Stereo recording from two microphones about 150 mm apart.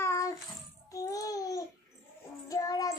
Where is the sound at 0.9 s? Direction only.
25° left (ahead or behind).